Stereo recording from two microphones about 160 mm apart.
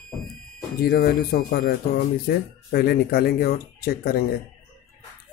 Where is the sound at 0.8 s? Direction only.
70° left (ahead or behind).